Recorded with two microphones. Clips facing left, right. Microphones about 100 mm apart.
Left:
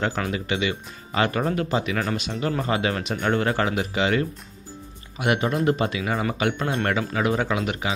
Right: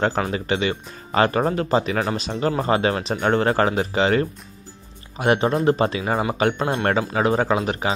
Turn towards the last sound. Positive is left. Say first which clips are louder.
# right 4 dB
turn(degrees=-35)  # may be behind; listen again after turning